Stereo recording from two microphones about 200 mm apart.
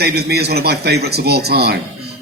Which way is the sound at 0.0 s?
55° right (ahead or behind).